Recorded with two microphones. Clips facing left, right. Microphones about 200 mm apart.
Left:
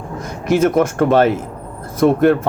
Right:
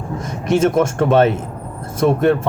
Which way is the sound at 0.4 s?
25° right (ahead or behind).